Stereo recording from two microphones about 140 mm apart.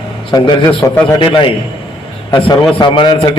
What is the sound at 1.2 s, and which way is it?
Speech, 35° left (ahead or behind).